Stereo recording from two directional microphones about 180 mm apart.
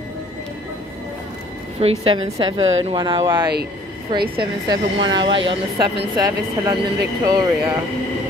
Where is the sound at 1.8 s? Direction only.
35° right (ahead or behind).